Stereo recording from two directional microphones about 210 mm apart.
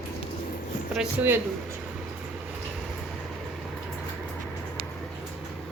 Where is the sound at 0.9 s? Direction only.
5° right (ahead or behind).